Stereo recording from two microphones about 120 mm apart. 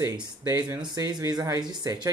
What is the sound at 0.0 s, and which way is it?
Speech, 30° right (ahead or behind).